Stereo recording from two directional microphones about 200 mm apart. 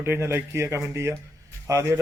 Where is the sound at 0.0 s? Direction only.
10° right (ahead or behind).